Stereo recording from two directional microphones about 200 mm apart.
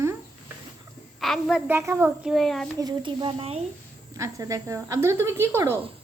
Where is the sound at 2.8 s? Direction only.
20° right (ahead or behind).